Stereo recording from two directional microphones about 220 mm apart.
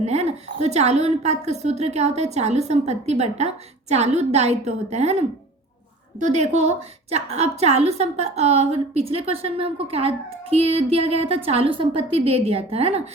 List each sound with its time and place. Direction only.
0.0 s a woman's voice: 30° right (ahead or behind)